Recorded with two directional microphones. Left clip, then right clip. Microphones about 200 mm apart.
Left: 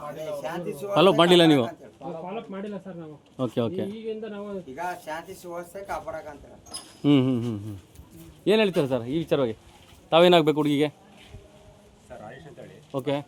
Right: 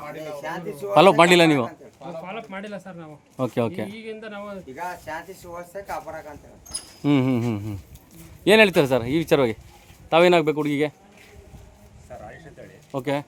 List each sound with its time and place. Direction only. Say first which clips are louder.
0.4 s speech: right 1 dB; 30° left (ahead or behind)
0.9 s a man's voice: right 4 dB; 15° right (ahead or behind)
3.3 s a man's voice: right 2 dB; 10° right (ahead or behind)
4.7 s speech: right 1 dB; 30° left (ahead or behind)
7.0 s a man's voice: even; 5° right (ahead or behind)
7.3 s speech: right 4 dB; 20° right (ahead or behind)
10.1 s a man's voice: right 1 dB; centre (ahead or behind)
12.1 s a sound: right 3 dB; centre (ahead or behind)
12.9 s a man's voice: right 2 dB; 10° right (ahead or behind)